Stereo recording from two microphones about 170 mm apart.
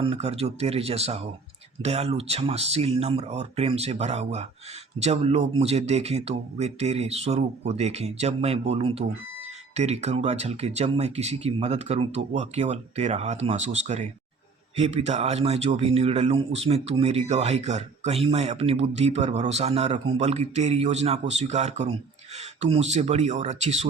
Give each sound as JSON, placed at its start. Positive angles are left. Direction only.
{"t": 0.0, "sound": "a man's voice", "side_deg": -35}